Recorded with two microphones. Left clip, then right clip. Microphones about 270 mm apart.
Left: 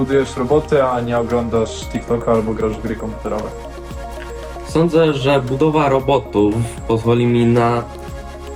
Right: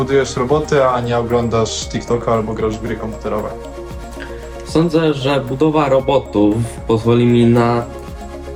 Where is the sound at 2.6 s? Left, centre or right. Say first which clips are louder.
Right 1 dB; right.